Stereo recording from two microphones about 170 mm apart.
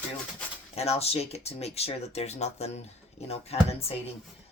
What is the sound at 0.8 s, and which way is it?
Speech, 35° left (ahead or behind).